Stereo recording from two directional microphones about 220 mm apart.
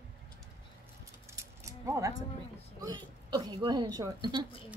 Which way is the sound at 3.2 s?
20° right (ahead or behind).